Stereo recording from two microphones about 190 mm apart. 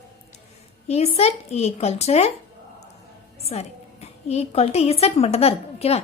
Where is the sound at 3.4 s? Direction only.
35° left (ahead or behind).